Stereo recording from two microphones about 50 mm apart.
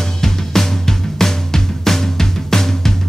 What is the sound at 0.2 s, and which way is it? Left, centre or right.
Music, centre.